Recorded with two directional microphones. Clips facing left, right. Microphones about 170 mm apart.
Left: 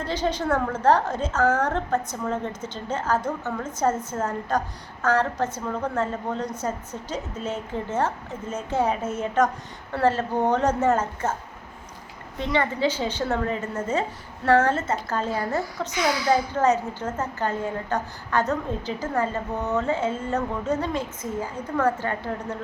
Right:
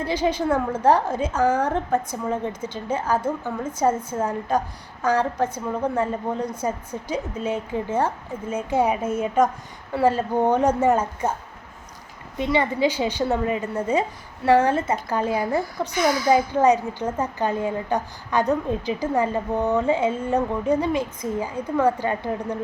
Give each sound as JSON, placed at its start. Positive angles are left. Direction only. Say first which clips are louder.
{"t": 0.0, "sound": "a woman's voice", "louder": "right 3 dB", "side_deg": -10}
{"t": 12.4, "sound": "a woman's voice", "louder": "right 3 dB", "side_deg": -15}
{"t": 16.0, "sound": "speech", "louder": "right 3 dB", "side_deg": -45}
{"t": 16.5, "sound": "a woman's voice", "louder": "right 3 dB", "side_deg": -15}